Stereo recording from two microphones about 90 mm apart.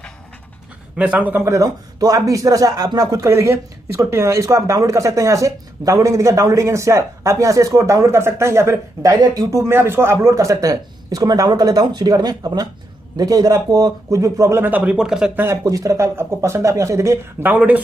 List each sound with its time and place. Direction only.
0.9 s a man's voice: 15° right (ahead or behind)
1.4 s speech: 35° right (ahead or behind)
3.3 s speech: 30° right (ahead or behind)
9.1 s speech: 45° right (ahead or behind)
14.6 s a man's voice: 15° right (ahead or behind)
15.5 s speech: 35° right (ahead or behind)
17.4 s speech: 20° right (ahead or behind)